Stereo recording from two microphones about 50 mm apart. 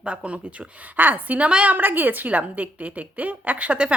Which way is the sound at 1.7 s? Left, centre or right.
Right.